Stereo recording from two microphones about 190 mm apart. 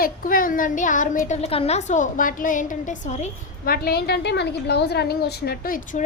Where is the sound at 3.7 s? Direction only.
55° left (ahead or behind).